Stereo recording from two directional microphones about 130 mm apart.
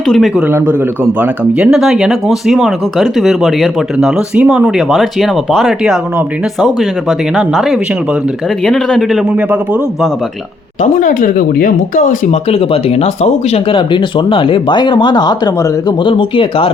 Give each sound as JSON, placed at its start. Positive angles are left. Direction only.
{"t": 0.1, "sound": "speech", "side_deg": 0}
{"t": 4.9, "sound": "speech", "side_deg": 0}
{"t": 11.0, "sound": "speech", "side_deg": 90}
{"t": 12.3, "sound": "speech", "side_deg": 50}